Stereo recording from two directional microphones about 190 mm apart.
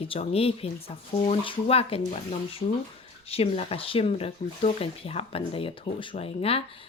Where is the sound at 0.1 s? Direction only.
30° left (ahead or behind).